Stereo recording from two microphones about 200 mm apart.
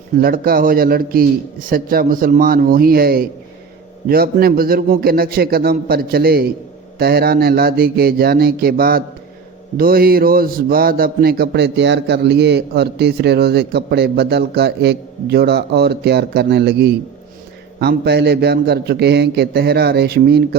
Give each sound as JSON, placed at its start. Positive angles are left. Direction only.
{"t": 0.2, "sound": "a man's voice", "side_deg": -45}